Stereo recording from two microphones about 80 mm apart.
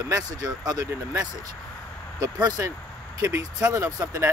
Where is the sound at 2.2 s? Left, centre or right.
Right.